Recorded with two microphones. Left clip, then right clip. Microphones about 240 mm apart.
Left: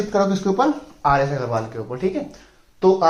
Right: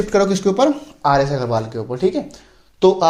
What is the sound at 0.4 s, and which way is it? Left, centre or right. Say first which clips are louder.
Speech: right 3 dB; right.